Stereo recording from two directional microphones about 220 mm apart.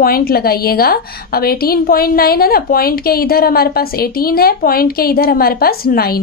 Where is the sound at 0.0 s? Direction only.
45° left (ahead or behind).